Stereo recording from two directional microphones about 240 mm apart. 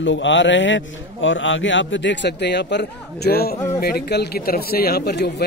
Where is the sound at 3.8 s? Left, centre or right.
Left.